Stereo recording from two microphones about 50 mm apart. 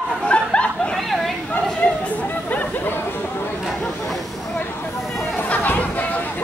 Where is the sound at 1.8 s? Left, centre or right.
Left.